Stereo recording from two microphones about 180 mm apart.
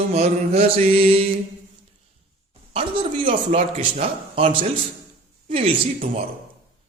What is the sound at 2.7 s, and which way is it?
A man's voice, 30° right (ahead or behind).